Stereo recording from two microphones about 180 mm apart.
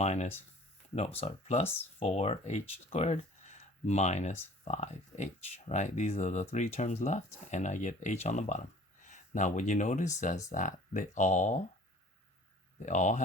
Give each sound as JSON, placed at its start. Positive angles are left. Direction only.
{"t": 0.0, "sound": "speech", "side_deg": 40}
{"t": 12.8, "sound": "speech", "side_deg": 45}